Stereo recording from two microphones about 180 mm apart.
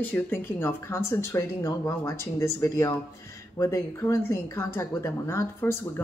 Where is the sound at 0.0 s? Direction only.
10° left (ahead or behind).